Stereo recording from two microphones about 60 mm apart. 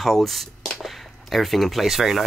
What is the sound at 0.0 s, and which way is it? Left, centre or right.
Speech, centre.